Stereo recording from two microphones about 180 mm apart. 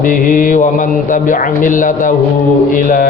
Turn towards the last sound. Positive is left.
turn(degrees=45)  # may be behind; listen again after turning